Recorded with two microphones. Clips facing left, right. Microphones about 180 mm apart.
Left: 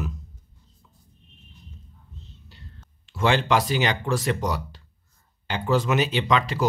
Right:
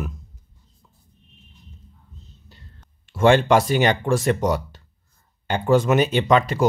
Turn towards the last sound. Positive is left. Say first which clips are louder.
# right 5 dB
turn(degrees=-45)  # may be behind; listen again after turning